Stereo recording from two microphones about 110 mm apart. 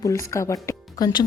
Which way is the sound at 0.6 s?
35° left (ahead or behind).